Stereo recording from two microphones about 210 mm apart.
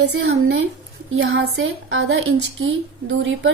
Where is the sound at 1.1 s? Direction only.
65° right (ahead or behind).